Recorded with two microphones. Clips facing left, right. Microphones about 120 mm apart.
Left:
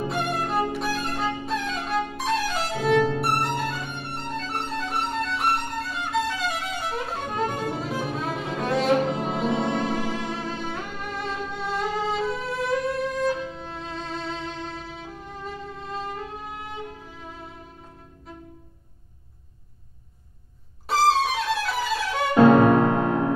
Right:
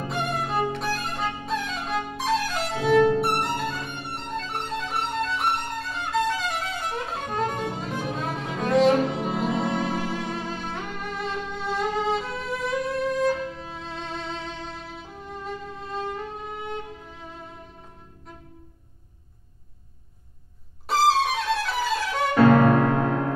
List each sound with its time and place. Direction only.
0.1 s violin: centre (ahead or behind)
20.8 s music: centre (ahead or behind)
22.3 s music: 20° left (ahead or behind)